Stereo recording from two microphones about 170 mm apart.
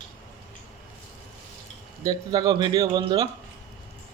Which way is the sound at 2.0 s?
25° right (ahead or behind).